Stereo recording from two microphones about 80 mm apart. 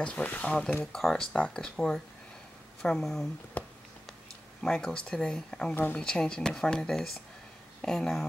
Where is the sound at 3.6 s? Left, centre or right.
Centre.